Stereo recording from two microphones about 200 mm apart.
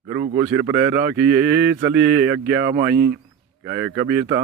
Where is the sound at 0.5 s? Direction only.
10° right (ahead or behind).